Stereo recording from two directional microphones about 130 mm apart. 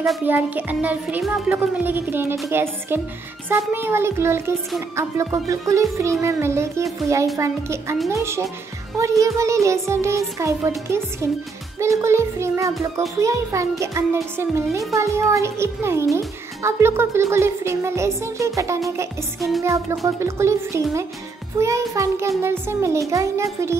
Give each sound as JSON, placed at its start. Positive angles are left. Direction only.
{"t": 0.2, "sound": "speech", "side_deg": -15}